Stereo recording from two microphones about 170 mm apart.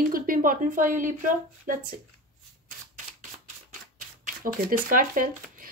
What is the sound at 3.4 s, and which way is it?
Speech, 45° right (ahead or behind).